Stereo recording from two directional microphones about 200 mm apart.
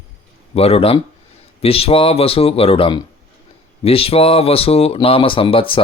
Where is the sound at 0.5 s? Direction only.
30° left (ahead or behind).